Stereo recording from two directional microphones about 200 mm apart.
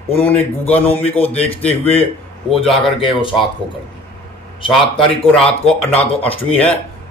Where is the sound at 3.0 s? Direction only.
25° left (ahead or behind).